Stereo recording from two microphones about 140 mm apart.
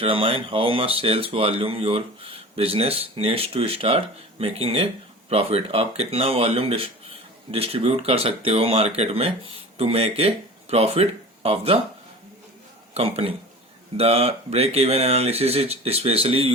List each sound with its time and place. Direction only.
0.0 s speech: 40° right (ahead or behind)
12.9 s speech: 45° right (ahead or behind)